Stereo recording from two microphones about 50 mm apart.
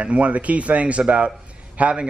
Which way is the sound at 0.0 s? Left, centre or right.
Right.